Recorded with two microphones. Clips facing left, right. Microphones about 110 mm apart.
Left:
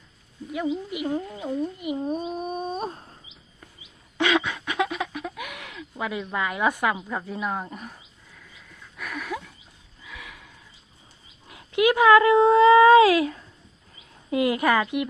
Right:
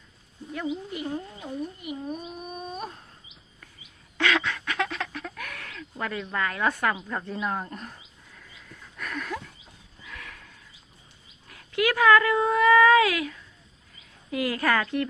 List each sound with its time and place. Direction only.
0.9 s speech: 15° left (ahead or behind); by 3.2 s 35° left (ahead or behind)
4.2 s a sound: 15° left (ahead or behind)
8.4 s dog: centre (ahead or behind)
10.0 s horse: 10° left (ahead or behind)
11.4 s speech: 20° left (ahead or behind)